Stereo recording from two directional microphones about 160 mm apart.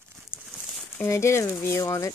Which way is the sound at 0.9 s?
15° left (ahead or behind).